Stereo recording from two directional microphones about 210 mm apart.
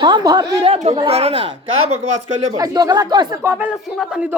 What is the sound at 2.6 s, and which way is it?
Speech, 20° right (ahead or behind).